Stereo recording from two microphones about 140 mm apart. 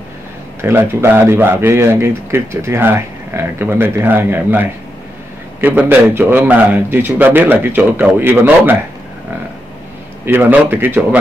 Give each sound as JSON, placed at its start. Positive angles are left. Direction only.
{"t": 0.6, "sound": "speech", "side_deg": -20}
{"t": 10.2, "sound": "speech", "side_deg": -15}